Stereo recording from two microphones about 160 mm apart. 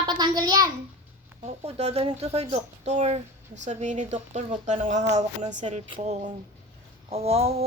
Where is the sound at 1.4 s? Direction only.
40° right (ahead or behind).